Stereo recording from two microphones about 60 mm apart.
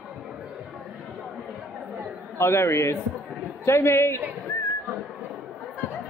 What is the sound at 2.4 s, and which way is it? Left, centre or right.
A woman's voice, left.